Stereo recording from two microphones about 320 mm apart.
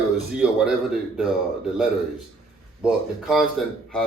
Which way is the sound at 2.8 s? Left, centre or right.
Centre.